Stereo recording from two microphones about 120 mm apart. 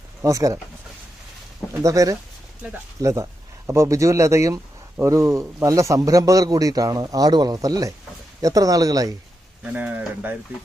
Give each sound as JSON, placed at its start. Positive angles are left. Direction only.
{"t": 0.2, "sound": "a man's voice", "side_deg": -25}
{"t": 1.8, "sound": "a man's voice", "side_deg": -30}
{"t": 2.6, "sound": "speech", "side_deg": -15}
{"t": 3.0, "sound": "a man's voice", "side_deg": -25}
{"t": 9.7, "sound": "speech", "side_deg": -15}